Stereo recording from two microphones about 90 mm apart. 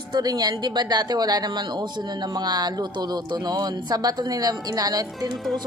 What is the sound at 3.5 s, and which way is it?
A woman's voice, 50° right (ahead or behind).